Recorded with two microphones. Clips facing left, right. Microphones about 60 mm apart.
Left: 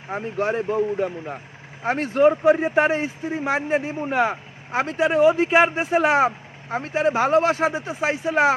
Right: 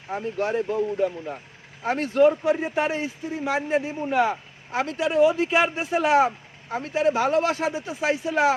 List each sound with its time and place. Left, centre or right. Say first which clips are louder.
0.1 s a man's voice: left 2 dB; left